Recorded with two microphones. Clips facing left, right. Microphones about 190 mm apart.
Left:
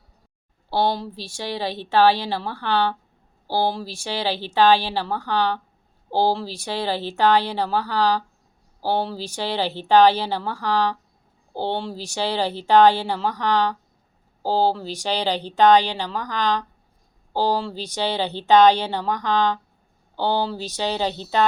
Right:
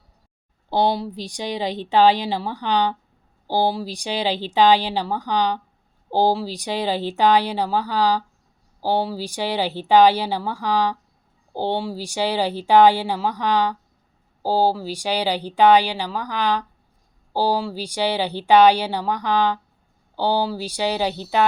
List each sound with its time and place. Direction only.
0.7 s speech: 15° right (ahead or behind)